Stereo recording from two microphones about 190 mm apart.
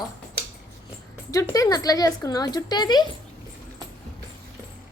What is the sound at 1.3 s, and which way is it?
Speech, 15° left (ahead or behind).